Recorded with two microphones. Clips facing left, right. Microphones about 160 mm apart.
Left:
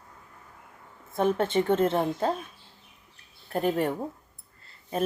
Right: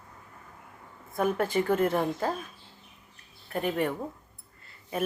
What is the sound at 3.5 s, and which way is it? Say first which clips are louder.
Speech: left 3 dB; 40° left (ahead or behind).